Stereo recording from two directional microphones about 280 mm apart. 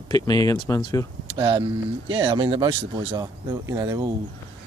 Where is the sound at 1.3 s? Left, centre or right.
Centre.